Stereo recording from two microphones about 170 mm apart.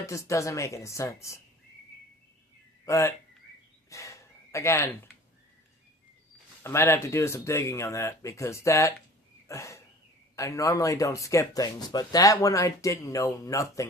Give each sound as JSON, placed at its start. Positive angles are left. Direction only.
{"t": 0.0, "sound": "speech", "side_deg": 15}
{"t": 2.8, "sound": "speech", "side_deg": 15}
{"t": 3.8, "sound": "gasp", "side_deg": 20}
{"t": 6.6, "sound": "speech", "side_deg": 15}
{"t": 9.5, "sound": "throat clearing", "side_deg": 15}
{"t": 10.3, "sound": "speech", "side_deg": 20}